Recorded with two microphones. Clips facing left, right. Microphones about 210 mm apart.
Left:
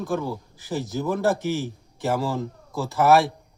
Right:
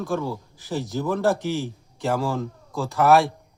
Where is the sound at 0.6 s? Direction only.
Centre (ahead or behind).